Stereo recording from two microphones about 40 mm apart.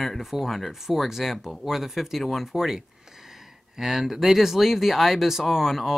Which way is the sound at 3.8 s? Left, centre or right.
Centre.